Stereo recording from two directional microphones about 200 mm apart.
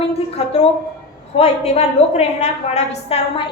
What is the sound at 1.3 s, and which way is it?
A woman's voice, 30° left (ahead or behind).